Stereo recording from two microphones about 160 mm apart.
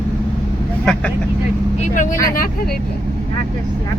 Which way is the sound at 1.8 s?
55° left (ahead or behind).